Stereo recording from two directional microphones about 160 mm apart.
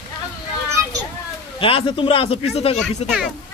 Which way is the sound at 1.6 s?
35° left (ahead or behind).